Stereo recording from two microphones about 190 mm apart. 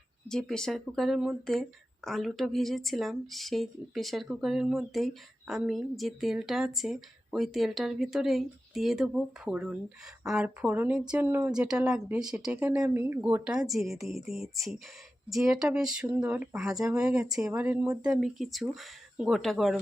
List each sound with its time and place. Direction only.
0.3 s speech: centre (ahead or behind)